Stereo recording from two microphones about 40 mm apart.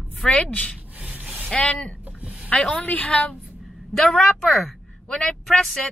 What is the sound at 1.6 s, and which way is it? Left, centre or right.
Speech, left.